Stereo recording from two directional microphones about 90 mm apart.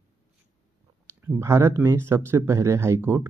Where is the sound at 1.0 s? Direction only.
30° right (ahead or behind).